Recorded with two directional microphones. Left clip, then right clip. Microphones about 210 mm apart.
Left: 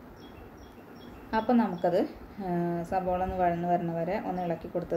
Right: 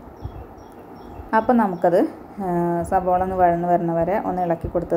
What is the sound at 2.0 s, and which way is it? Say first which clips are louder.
A woman's voice: right 9 dB; 15° right (ahead or behind).